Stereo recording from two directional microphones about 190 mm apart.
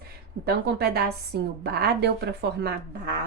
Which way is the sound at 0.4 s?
55° right (ahead or behind).